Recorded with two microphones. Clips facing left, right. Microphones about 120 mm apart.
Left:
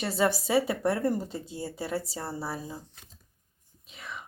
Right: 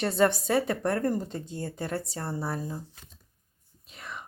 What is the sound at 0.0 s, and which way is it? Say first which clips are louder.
A woman's voice: right 3 dB; 5° left (ahead or behind).